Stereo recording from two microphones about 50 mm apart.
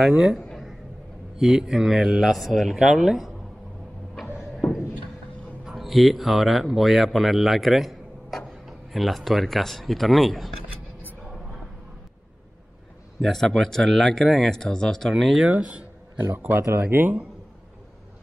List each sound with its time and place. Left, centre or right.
0.0 s speech: centre
1.4 s speech: centre
5.7 s speech: centre
13.2 s speech: centre
15.4 s speech: right
16.4 s speech: right